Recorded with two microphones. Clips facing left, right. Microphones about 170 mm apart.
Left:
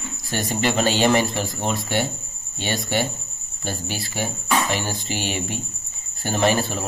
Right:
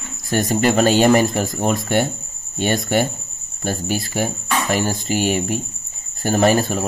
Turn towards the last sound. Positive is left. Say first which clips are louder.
# right 5 dB
turn(degrees=-45)  # may be behind; listen again after turning